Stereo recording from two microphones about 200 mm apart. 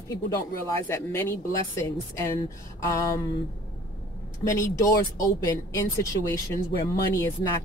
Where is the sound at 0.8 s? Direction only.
10° left (ahead or behind).